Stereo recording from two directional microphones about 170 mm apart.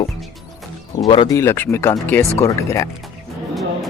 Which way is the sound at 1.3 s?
15° left (ahead or behind).